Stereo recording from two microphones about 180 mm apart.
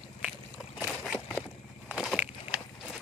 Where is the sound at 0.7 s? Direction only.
5° right (ahead or behind).